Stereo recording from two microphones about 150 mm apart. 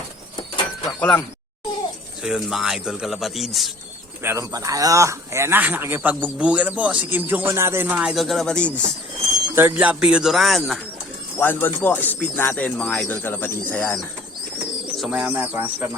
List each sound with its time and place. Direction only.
0.9 s speech: 15° left (ahead or behind)
2.2 s speech: 5° right (ahead or behind)
4.2 s speech: 20° right (ahead or behind); by 8.7 s 5° left (ahead or behind)
9.6 s speech: 15° right (ahead or behind)
11.3 s speech: 10° left (ahead or behind)
15.0 s speech: 10° right (ahead or behind)